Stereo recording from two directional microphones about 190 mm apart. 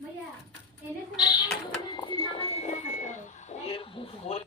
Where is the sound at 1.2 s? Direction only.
20° left (ahead or behind).